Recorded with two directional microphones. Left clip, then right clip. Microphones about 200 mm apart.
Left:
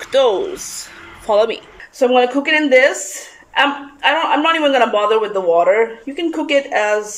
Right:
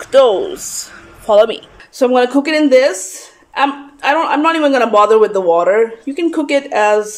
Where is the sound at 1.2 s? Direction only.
10° right (ahead or behind).